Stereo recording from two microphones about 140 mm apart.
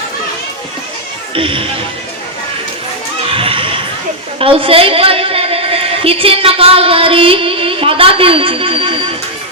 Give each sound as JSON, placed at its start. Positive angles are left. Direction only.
{"t": 1.4, "sound": "a woman's voice", "side_deg": -40}
{"t": 3.2, "sound": "children shouting", "side_deg": -40}
{"t": 4.4, "sound": "a woman's voice", "side_deg": -40}